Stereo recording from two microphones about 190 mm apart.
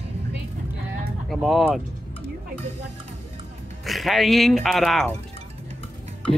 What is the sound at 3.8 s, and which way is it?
Speech, centre (ahead or behind).